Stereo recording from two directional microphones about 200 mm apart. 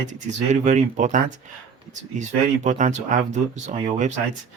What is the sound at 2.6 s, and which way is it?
Speech, 40° right (ahead or behind).